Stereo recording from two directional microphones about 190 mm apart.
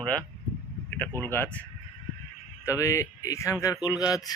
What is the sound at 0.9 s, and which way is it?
A man's voice, 10° left (ahead or behind).